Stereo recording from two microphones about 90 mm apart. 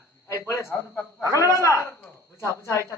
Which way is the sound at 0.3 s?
35° left (ahead or behind).